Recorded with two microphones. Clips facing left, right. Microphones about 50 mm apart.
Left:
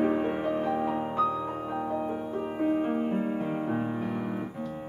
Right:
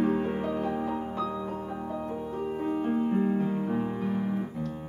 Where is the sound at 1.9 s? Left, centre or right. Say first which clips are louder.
Left 3 dB; left.